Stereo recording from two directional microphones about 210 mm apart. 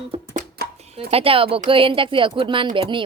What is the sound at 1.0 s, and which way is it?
A woman's voice, 25° right (ahead or behind).